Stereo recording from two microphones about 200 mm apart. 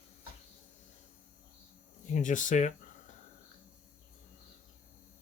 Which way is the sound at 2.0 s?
40° left (ahead or behind).